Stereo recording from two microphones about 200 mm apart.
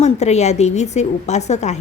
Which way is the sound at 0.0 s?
35° left (ahead or behind).